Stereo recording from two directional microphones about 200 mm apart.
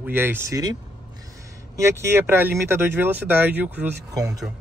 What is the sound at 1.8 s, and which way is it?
A man's voice, 15° right (ahead or behind).